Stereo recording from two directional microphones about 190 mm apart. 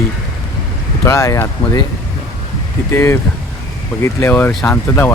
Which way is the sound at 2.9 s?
10° left (ahead or behind).